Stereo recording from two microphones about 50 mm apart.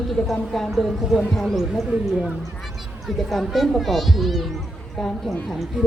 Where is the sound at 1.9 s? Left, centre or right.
Centre.